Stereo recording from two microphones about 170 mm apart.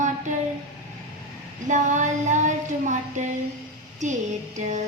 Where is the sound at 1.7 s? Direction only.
45° right (ahead or behind).